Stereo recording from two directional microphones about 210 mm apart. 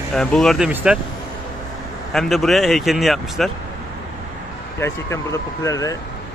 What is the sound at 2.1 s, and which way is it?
A man's voice, centre (ahead or behind).